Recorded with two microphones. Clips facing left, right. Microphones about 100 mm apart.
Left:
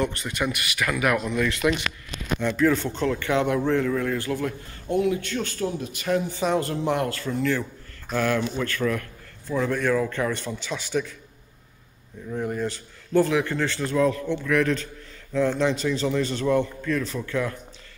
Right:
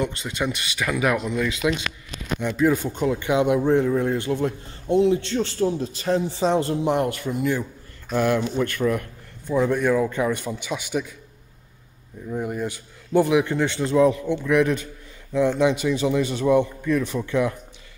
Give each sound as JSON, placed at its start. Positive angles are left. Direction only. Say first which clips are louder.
{"t": 0.0, "sound": "a man's voice", "louder": "even", "side_deg": -20}
{"t": 12.3, "sound": "a man's voice", "louder": "even", "side_deg": -10}